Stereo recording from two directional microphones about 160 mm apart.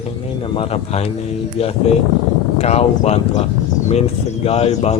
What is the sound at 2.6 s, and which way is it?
Speech, 40° left (ahead or behind).